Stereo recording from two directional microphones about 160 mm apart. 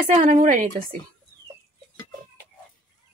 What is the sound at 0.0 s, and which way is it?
Speech, 55° right (ahead or behind).